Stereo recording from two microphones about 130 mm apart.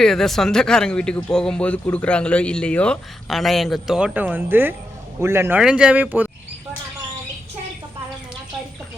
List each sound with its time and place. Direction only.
0.0 s a man's voice: 5° left (ahead or behind); by 5.5 s 20° right (ahead or behind)
5.5 s speech: 10° right (ahead or behind)